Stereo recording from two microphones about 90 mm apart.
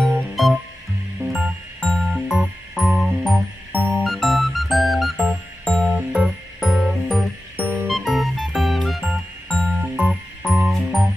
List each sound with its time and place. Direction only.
0.0 s music: 5° left (ahead or behind)
1.8 s music: 5° left (ahead or behind)
5.9 s music: 5° right (ahead or behind)
7.5 s music: 10° left (ahead or behind)
9.8 s music: 10° right (ahead or behind)